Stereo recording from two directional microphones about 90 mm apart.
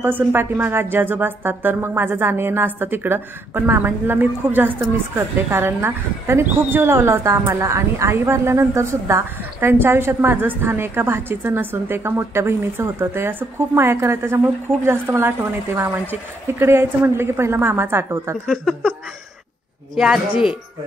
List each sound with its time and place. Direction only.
0.0 s speech: 25° right (ahead or behind)
18.5 s a sound: centre (ahead or behind)
20.0 s speech: 5° right (ahead or behind)